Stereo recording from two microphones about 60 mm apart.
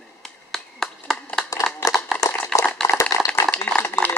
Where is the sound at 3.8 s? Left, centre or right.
Left.